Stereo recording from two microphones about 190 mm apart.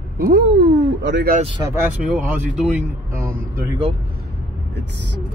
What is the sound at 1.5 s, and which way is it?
Speech, 15° right (ahead or behind).